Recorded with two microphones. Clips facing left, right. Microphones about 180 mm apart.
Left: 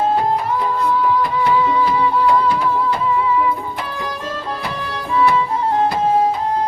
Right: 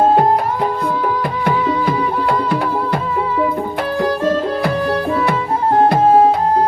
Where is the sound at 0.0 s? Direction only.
55° right (ahead or behind).